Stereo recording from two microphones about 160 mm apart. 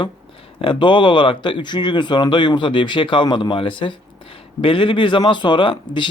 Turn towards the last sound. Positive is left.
turn(degrees=30)  # may be behind; listen again after turning